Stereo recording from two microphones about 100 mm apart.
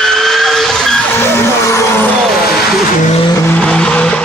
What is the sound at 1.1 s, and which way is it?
Vehicle, 25° left (ahead or behind).